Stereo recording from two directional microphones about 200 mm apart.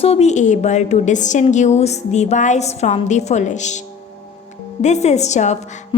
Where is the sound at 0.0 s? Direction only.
30° left (ahead or behind).